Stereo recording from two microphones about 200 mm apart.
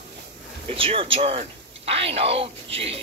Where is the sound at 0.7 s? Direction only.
25° right (ahead or behind).